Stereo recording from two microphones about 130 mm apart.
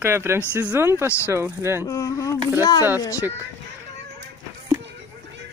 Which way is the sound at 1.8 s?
25° left (ahead or behind).